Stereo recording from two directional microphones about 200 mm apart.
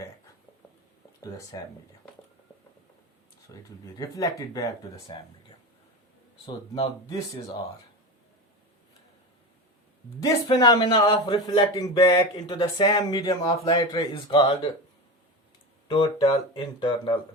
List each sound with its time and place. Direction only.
3.5 s speech: 15° left (ahead or behind)
6.4 s a man's voice: 25° left (ahead or behind)
10.2 s a man's voice: 20° left (ahead or behind)
15.9 s a man's voice: 20° left (ahead or behind)